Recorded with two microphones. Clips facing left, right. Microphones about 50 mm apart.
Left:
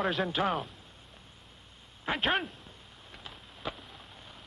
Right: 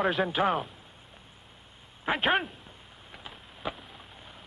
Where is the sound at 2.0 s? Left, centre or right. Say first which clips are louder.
Right 3 dB; centre.